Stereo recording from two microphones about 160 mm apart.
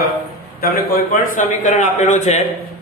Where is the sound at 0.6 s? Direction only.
65° left (ahead or behind); by 2.4 s 45° left (ahead or behind).